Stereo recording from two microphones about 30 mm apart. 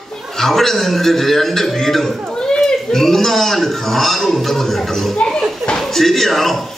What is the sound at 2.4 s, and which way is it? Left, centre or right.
Children playing, left.